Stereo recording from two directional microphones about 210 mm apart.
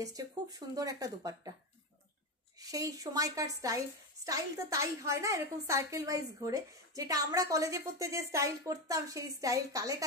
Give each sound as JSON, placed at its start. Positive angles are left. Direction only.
{"t": 0.0, "sound": "a woman's voice", "side_deg": -15}
{"t": 2.6, "sound": "a woman's voice", "side_deg": -15}